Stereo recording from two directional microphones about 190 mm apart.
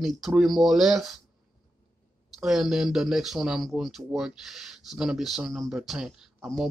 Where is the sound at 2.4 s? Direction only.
Centre (ahead or behind).